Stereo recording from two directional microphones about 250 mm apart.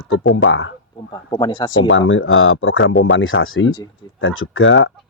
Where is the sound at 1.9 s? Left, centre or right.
Left.